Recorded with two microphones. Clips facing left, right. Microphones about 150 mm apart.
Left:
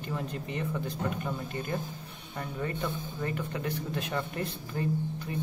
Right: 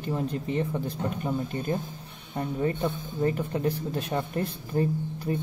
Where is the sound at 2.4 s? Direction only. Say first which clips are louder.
Right 7 dB; 25° right (ahead or behind).